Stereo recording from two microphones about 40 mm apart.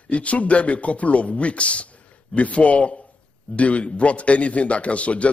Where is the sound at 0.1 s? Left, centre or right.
Left.